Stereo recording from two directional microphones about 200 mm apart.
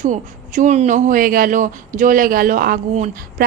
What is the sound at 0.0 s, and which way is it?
A woman's voice, 40° right (ahead or behind).